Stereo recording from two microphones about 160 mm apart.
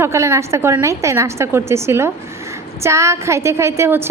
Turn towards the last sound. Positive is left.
turn(degrees=-15)  # may be behind; listen again after turning